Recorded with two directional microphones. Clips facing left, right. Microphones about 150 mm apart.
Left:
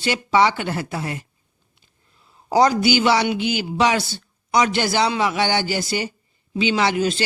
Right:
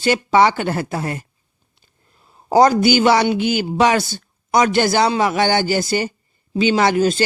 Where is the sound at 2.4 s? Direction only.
45° right (ahead or behind).